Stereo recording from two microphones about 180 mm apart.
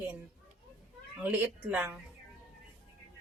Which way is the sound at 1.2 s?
10° right (ahead or behind).